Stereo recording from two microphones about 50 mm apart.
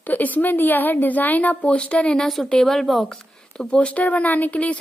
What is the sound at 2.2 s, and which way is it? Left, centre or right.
Speech, centre.